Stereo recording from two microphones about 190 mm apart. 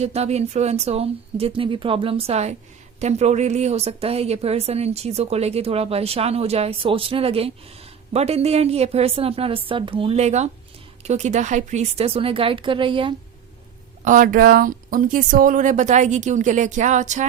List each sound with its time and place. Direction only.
0.0 s a woman's voice: 35° right (ahead or behind)
14.0 s a woman's voice: 45° right (ahead or behind)